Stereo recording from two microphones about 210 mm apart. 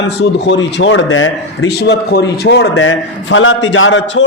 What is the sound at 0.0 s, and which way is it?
A man's voice, 55° left (ahead or behind).